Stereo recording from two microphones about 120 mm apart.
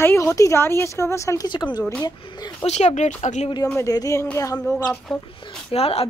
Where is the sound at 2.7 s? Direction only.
65° left (ahead or behind).